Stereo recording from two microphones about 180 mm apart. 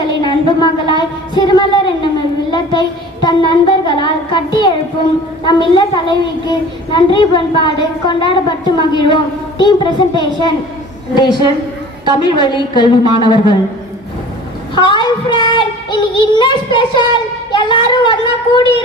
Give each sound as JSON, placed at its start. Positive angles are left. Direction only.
{"t": 0.2, "sound": "a woman's voice", "side_deg": 25}
{"t": 14.8, "sound": "child singing", "side_deg": 25}
{"t": 17.5, "sound": "a child's voice", "side_deg": 25}